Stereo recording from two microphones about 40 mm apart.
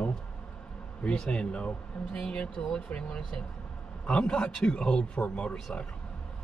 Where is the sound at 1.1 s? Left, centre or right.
Left.